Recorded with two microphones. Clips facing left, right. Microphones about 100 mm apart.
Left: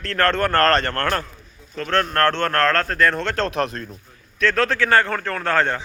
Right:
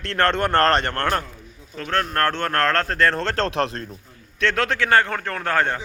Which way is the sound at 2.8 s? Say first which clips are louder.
Left 1 dB; 30° right (ahead or behind).